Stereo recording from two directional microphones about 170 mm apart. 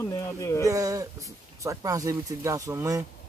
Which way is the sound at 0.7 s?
20° right (ahead or behind).